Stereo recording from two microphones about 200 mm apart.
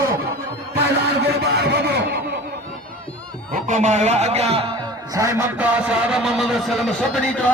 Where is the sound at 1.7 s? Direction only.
55° right (ahead or behind).